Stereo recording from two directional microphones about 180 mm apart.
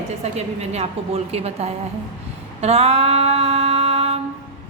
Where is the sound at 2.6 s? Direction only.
35° right (ahead or behind).